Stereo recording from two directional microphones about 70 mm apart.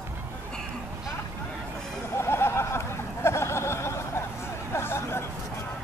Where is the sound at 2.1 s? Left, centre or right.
Left.